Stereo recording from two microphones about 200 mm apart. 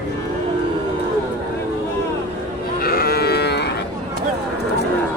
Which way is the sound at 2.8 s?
50° left (ahead or behind).